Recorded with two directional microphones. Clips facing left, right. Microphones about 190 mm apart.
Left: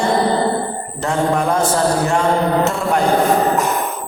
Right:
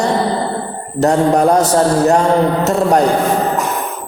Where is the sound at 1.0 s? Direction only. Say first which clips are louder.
Right 6 dB; 40° right (ahead or behind).